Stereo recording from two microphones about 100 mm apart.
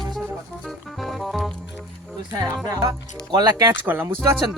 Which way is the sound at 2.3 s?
40° right (ahead or behind).